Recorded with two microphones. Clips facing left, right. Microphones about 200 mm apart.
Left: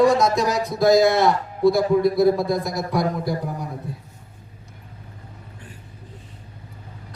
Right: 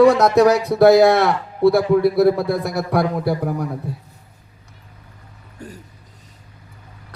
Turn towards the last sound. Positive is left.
turn(degrees=-40)  # may be behind; listen again after turning